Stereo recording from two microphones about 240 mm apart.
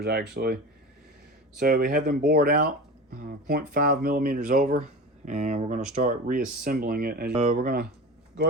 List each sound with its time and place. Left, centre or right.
0.0 s speech: right